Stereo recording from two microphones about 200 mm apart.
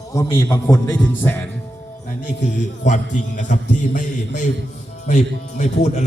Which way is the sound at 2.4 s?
40° left (ahead or behind).